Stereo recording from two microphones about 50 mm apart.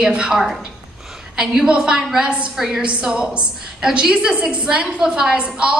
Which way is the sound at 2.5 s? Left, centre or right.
Centre.